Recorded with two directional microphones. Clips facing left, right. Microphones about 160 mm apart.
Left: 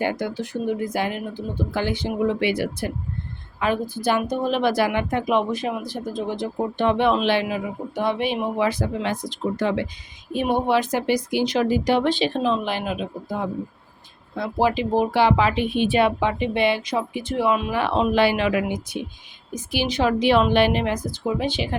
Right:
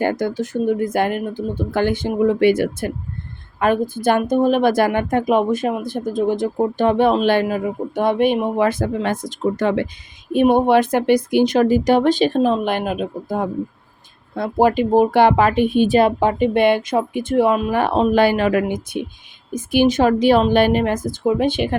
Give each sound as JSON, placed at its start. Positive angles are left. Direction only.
{"t": 0.0, "sound": "a woman's voice", "side_deg": -45}